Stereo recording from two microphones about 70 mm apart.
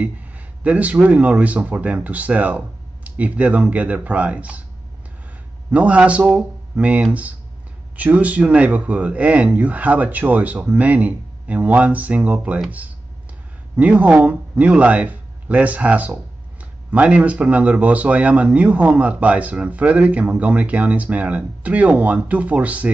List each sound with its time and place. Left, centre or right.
0.7 s speech: right
5.7 s speech: centre
13.7 s speech: centre